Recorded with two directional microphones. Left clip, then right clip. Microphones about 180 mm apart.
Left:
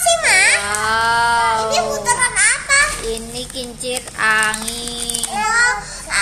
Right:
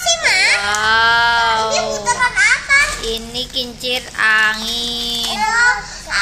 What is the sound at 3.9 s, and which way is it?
A child's voice, 5° left (ahead or behind).